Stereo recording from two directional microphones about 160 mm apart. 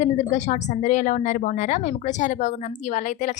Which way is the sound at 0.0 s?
45° left (ahead or behind).